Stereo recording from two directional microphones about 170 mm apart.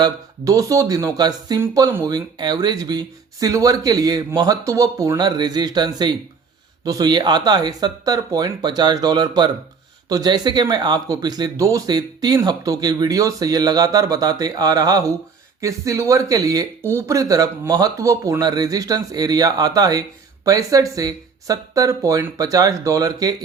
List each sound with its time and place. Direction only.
0.0 s speech: 20° right (ahead or behind)